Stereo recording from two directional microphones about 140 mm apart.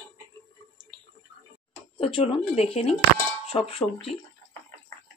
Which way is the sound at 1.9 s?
40° left (ahead or behind).